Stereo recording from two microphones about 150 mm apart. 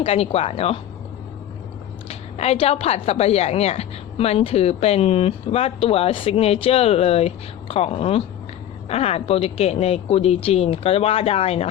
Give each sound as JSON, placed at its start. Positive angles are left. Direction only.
{"t": 0.0, "sound": "speech", "side_deg": 40}
{"t": 2.0, "sound": "a woman's voice", "side_deg": 45}